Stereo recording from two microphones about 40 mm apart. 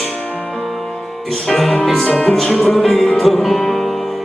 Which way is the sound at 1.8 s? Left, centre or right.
Centre.